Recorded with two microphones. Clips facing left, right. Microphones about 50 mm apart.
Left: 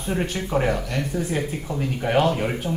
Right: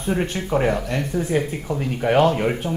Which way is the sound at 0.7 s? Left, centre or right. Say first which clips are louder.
Right 3 dB; right.